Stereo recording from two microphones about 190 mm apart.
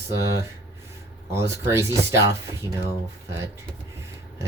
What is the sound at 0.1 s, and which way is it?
Speech, 15° right (ahead or behind).